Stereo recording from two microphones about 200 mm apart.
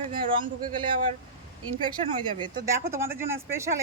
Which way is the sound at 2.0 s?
30° right (ahead or behind).